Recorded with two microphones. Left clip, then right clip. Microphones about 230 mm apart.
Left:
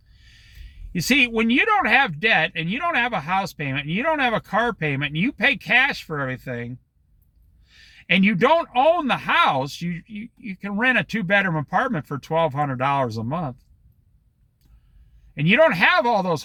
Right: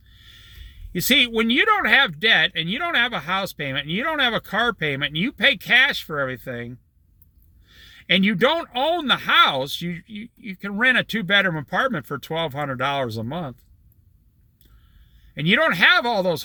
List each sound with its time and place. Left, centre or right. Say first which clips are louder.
0.2 s a sound: right 4 dB; left
1.0 s speech: right 1 dB; centre
15.4 s speech: left 1 dB; centre